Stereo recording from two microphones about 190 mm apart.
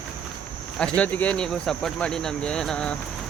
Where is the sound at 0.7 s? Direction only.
5° left (ahead or behind).